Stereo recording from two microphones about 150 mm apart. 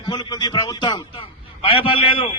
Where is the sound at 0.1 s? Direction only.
30° left (ahead or behind).